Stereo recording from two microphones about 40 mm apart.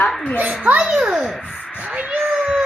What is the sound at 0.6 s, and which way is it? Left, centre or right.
Speech, right.